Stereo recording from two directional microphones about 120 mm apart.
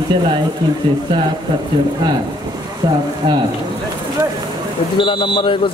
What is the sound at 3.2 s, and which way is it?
Speech, 40° right (ahead or behind).